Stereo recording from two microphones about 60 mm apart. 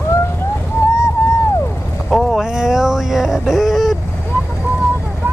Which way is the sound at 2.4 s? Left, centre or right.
Centre.